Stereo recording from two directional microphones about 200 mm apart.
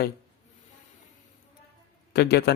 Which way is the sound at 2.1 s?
55° left (ahead or behind).